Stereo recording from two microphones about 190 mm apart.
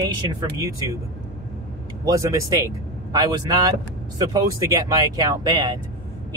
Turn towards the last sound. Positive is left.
turn(degrees=-20)  # may be behind; listen again after turning